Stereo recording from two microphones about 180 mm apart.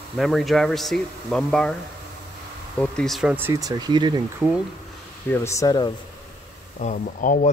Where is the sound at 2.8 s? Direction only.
5° left (ahead or behind); by 4.2 s 25° right (ahead or behind).